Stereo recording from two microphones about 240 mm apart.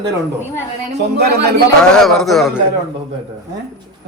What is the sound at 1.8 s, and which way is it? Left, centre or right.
Speech, centre.